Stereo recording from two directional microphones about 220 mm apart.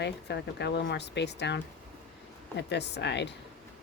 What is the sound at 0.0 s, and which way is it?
Speech, 50° left (ahead or behind).